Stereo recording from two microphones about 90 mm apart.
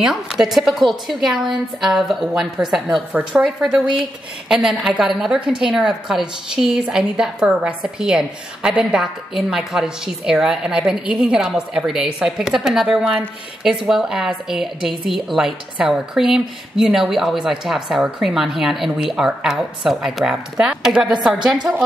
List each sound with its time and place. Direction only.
0.0 s a woman's voice: 5° right (ahead or behind)
3.1 s a woman's voice: 15° right (ahead or behind)
3.4 s a woman's voice: 5° right (ahead or behind)